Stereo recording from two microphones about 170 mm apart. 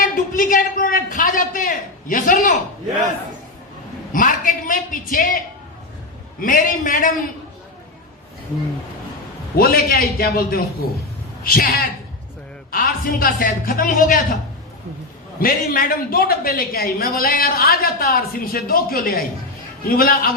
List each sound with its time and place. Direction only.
0.0 s a man's voice: 50° left (ahead or behind)
4.1 s a man's voice: 50° left (ahead or behind)
6.4 s a man's voice: 55° left (ahead or behind)
9.6 s a man's voice: 60° left (ahead or behind)
12.7 s a man's voice: 55° left (ahead or behind)
15.4 s a man's voice: 55° left (ahead or behind)